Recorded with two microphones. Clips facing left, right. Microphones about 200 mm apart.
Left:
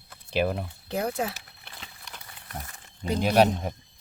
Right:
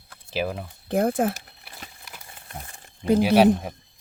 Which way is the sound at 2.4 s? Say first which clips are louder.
Left 1 dB; 30° right (ahead or behind).